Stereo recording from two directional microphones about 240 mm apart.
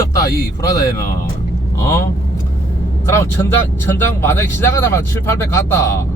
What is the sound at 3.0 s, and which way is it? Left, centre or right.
Speech, centre.